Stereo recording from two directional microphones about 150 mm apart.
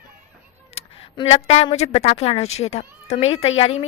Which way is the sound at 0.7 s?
40° left (ahead or behind).